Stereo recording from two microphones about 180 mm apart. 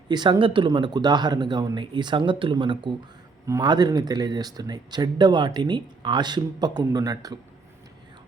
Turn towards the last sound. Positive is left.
turn(degrees=-20)  # may be behind; listen again after turning